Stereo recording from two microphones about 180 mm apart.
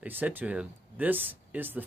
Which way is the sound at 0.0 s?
10° right (ahead or behind).